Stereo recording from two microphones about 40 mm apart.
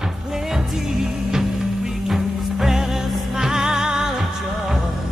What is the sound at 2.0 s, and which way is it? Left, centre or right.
Music, centre.